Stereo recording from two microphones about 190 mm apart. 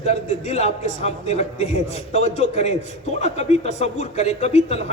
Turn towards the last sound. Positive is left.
turn(degrees=35)  # may be behind; listen again after turning